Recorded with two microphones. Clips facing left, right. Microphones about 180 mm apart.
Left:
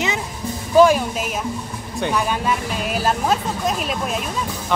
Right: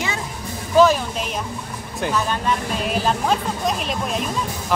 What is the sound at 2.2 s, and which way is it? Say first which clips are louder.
Speech: even; 5° left (ahead or behind).